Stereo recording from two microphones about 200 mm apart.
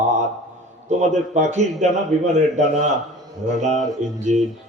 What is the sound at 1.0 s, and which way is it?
Mantra, 35° right (ahead or behind).